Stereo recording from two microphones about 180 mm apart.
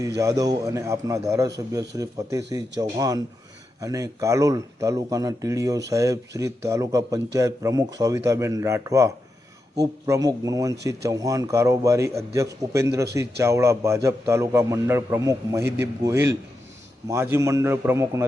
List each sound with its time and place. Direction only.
0.2 s a man's voice: 20° right (ahead or behind)